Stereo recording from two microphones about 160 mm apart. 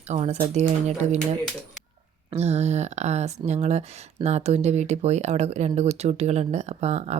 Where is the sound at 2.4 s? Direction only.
40° right (ahead or behind).